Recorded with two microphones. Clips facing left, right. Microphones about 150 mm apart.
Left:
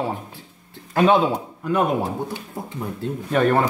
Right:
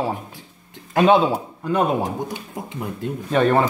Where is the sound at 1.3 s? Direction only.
30° right (ahead or behind).